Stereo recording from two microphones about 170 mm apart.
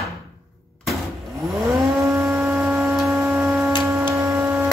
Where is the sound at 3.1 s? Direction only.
15° right (ahead or behind).